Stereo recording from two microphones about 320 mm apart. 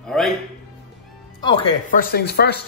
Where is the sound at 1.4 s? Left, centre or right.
Centre.